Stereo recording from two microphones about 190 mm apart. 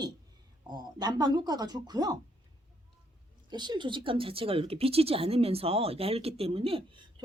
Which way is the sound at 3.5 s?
20° right (ahead or behind).